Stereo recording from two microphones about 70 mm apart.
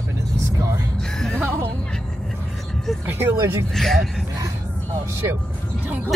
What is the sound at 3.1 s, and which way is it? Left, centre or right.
Speech, right.